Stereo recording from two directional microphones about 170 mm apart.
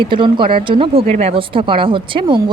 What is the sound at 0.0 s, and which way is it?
Speech, 30° right (ahead or behind).